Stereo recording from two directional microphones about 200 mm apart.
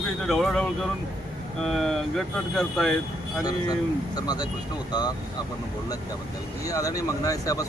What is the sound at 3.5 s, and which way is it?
Speech, 20° left (ahead or behind).